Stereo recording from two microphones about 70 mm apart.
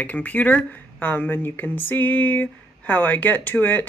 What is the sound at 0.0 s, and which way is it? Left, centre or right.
Speech, left.